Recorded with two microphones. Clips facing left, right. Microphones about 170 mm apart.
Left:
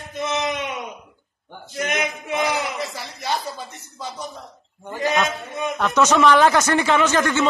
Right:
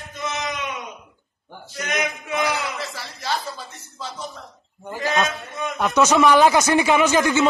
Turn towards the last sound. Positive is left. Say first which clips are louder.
# right 1 dB
turn(degrees=-10)  # may be behind; listen again after turning